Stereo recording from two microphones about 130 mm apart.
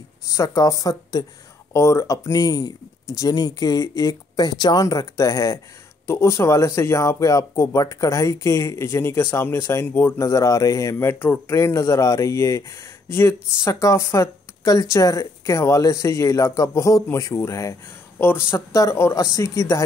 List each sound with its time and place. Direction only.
0.3 s speech: 25° left (ahead or behind)